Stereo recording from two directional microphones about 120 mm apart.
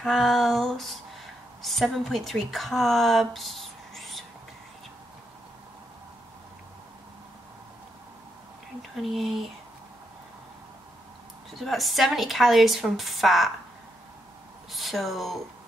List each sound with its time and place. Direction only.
0.0 s speech: centre (ahead or behind)
8.9 s speech: centre (ahead or behind)
11.5 s speech: centre (ahead or behind)
14.7 s speech: centre (ahead or behind)